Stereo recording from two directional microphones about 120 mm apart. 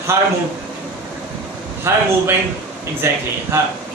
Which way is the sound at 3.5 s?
20° right (ahead or behind).